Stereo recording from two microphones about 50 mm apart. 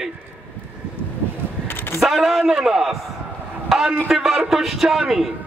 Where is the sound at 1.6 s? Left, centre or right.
Left.